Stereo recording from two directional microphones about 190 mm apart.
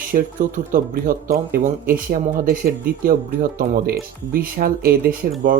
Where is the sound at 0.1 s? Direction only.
45° right (ahead or behind).